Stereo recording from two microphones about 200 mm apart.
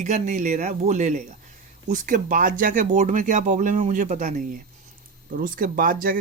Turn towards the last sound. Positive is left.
turn(degrees=-45)  # may be behind; listen again after turning